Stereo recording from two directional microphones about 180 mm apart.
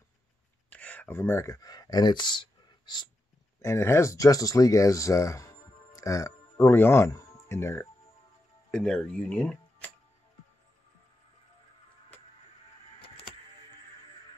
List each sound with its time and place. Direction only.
0.7 s speech: 5° left (ahead or behind); by 2.4 s 25° left (ahead or behind)
2.9 s dog: 25° left (ahead or behind)
3.6 s speech: 15° left (ahead or behind)